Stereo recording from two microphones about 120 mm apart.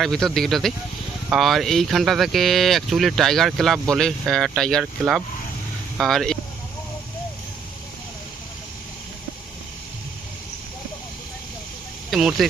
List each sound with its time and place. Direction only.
0.0 s speech: 5° left (ahead or behind)
12.1 s speech: centre (ahead or behind)